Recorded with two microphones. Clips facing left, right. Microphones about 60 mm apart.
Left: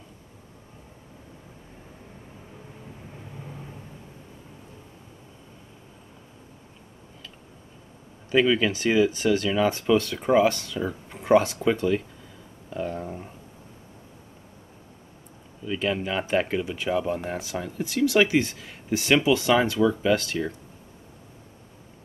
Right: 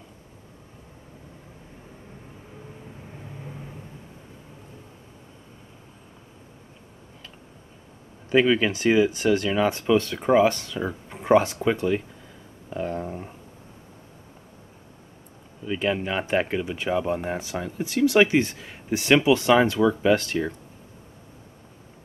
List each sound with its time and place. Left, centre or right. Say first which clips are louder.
8.3 s speech: right 1 dB; centre
10.1 s speech: right 2 dB; centre
10.4 s speech: right 1 dB; right
11.2 s speech: right 1 dB; right
11.6 s speech: even; centre
12.6 s a sound: right 2 dB; centre
15.6 s speech: right 1 dB; centre
18.2 s speech: right 2 dB; right
18.9 s speech: right 2 dB; centre